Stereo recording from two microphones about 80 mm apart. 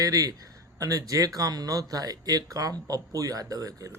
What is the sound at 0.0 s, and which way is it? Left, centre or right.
Speech, right.